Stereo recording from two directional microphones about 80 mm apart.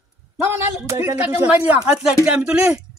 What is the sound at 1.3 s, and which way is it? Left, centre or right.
Speech, centre.